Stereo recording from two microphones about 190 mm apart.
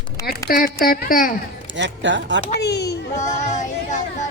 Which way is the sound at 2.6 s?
60° left (ahead or behind).